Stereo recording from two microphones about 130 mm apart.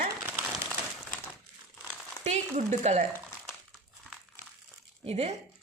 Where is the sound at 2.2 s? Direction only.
60° right (ahead or behind).